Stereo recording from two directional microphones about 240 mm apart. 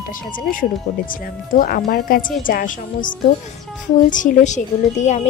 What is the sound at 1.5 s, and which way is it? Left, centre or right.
A woman's voice, left.